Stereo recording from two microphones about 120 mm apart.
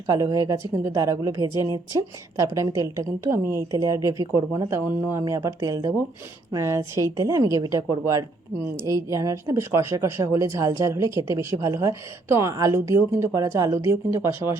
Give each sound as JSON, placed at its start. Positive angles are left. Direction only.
{"t": 0.1, "sound": "a woman's voice", "side_deg": -30}